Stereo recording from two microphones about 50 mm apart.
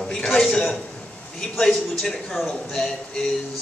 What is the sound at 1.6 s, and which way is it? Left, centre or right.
A man's voice, centre.